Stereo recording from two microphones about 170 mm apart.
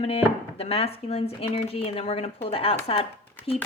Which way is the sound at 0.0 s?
35° left (ahead or behind).